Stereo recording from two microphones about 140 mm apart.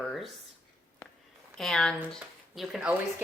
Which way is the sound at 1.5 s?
5° left (ahead or behind).